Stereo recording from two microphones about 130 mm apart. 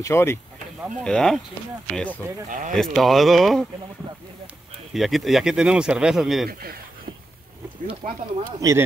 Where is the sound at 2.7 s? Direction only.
Centre (ahead or behind).